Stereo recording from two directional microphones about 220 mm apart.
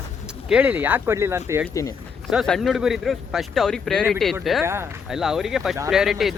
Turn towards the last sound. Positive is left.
turn(degrees=0)  # may be behind; listen again after turning